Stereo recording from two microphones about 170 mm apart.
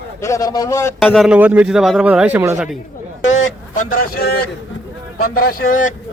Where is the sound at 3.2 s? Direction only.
45° left (ahead or behind).